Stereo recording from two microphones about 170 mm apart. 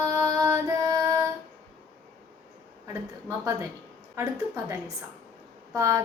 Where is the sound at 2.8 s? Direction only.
15° right (ahead or behind).